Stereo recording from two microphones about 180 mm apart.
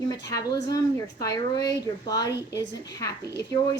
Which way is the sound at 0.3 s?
20° left (ahead or behind).